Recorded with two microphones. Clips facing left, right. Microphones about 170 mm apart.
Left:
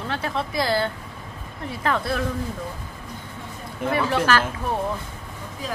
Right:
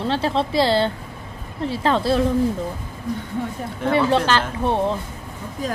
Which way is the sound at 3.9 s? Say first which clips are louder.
Right 3 dB; 25° right (ahead or behind).